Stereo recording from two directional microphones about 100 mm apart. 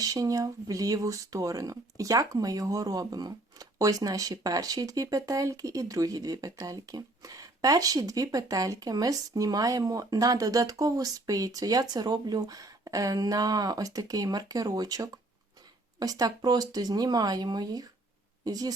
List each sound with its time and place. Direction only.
0.0 s speech: 35° right (ahead or behind)